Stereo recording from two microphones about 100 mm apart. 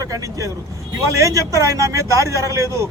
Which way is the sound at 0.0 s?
35° right (ahead or behind).